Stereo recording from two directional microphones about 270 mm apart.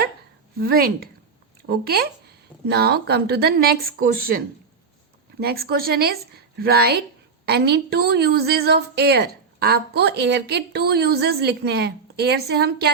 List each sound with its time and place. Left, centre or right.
0.6 s a woman's voice: right